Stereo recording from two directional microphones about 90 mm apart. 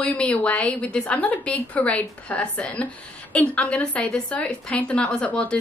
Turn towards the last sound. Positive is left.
turn(degrees=10)  # may be behind; listen again after turning